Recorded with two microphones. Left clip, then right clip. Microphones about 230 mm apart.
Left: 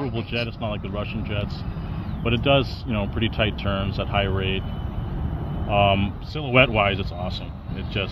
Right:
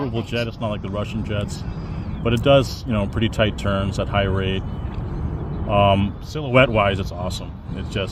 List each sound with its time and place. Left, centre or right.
0.1 s speech: right
5.7 s speech: right